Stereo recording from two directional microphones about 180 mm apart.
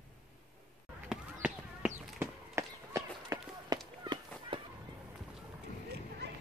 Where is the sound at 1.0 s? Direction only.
5° right (ahead or behind).